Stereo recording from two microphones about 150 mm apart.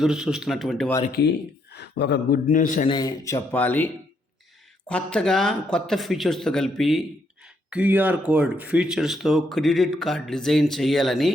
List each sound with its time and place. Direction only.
0.0 s speech: 5° right (ahead or behind)
1.7 s a man's voice: 90° left; by 2.9 s 60° left (ahead or behind)
2.9 s speech: 25° left (ahead or behind); by 11.3 s centre (ahead or behind)